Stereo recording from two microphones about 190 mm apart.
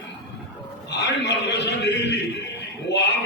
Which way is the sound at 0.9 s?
65° left (ahead or behind).